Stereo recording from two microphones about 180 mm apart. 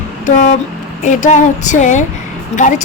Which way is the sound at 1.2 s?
45° left (ahead or behind).